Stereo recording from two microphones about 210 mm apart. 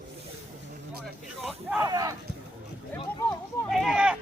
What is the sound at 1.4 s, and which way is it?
Speech, centre (ahead or behind).